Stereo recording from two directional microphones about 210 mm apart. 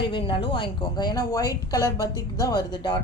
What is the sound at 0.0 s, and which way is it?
A woman's voice, 25° left (ahead or behind).